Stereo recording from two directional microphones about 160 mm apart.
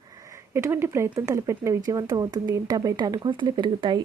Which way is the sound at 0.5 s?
15° right (ahead or behind).